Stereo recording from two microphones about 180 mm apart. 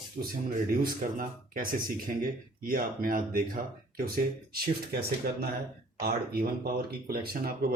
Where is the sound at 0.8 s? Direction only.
50° right (ahead or behind).